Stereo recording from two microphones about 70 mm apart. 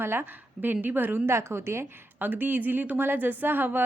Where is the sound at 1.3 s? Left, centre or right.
Right.